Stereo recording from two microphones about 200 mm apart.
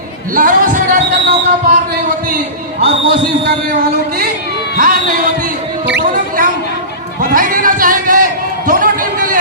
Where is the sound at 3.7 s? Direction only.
50° right (ahead or behind).